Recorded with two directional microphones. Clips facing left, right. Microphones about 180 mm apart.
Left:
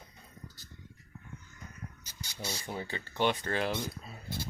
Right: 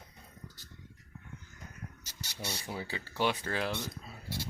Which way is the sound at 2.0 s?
70° right (ahead or behind).